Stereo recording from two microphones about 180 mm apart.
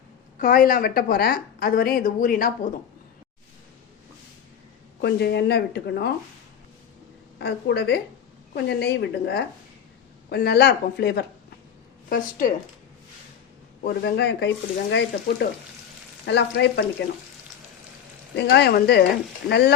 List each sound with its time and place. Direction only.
0.3 s a woman's voice: 50° left (ahead or behind)
4.9 s speech: 65° left (ahead or behind)
7.3 s speech: 70° left (ahead or behind)
12.0 s a woman's voice: 50° left (ahead or behind)
13.8 s speech: 65° left (ahead or behind)
18.3 s speech: 70° left (ahead or behind)